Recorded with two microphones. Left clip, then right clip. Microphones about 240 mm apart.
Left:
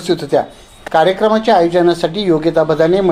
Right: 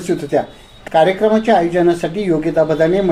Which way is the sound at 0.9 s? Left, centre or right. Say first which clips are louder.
Left 1 dB; left.